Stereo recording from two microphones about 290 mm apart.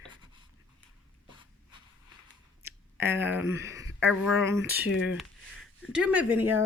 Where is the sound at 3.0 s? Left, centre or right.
Centre.